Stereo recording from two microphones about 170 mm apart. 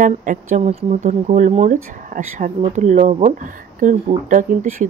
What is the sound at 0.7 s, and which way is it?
Speech, 40° right (ahead or behind).